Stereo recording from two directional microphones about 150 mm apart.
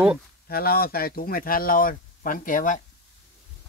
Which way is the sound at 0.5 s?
90° left.